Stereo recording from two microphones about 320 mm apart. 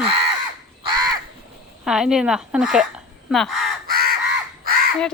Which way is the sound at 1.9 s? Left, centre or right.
Centre.